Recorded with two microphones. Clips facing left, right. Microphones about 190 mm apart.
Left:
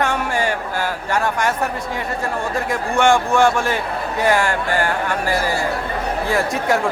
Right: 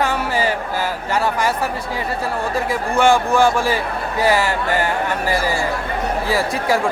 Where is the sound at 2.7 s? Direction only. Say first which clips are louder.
Even; centre (ahead or behind).